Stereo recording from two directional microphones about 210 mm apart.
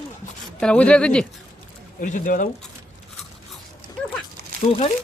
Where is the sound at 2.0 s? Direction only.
40° left (ahead or behind).